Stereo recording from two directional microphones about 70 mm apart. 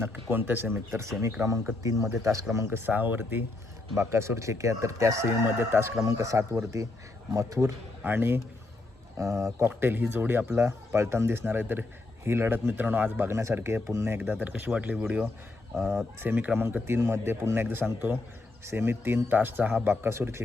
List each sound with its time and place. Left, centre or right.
0.0 s speech: right
1.8 s speech: right
2.6 s speech: right
3.9 s speech: right
6.0 s speech: right
8.0 s speech: right
9.1 s speech: right
9.6 s speech: right
15.7 s speech: centre
16.2 s speech: right
16.6 s speech: right